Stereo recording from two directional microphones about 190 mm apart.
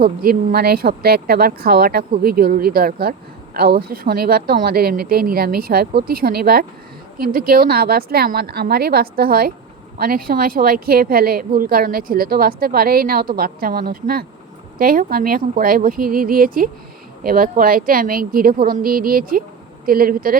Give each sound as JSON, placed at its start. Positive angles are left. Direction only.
{"t": 0.0, "sound": "speech", "side_deg": -50}